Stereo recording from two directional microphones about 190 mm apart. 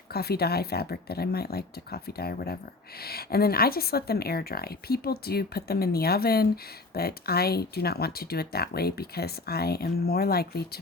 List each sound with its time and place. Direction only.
0.1 s a woman's voice: 55° left (ahead or behind)